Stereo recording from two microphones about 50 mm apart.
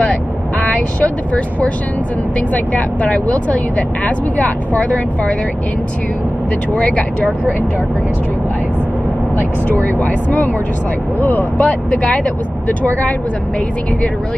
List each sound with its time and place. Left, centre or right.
0.0 s vehicle: left
2.5 s speech: left
6.7 s speech: left
10.0 s speech: left
11.6 s speech: left